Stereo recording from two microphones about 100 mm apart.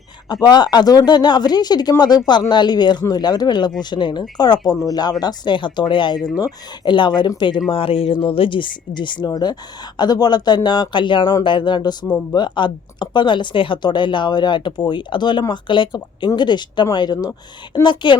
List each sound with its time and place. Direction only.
0.4 s speech: 45° left (ahead or behind)
7.7 s speech: 65° left (ahead or behind); by 17.3 s 40° left (ahead or behind)
17.8 s speech: 50° left (ahead or behind)